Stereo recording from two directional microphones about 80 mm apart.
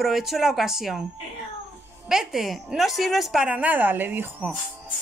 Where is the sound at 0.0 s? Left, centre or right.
Centre.